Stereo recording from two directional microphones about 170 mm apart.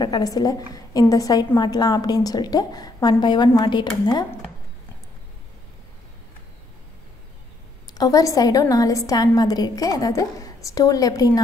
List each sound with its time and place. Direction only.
0.0 s a woman's voice: 20° left (ahead or behind)
7.8 s a woman's voice: 20° left (ahead or behind)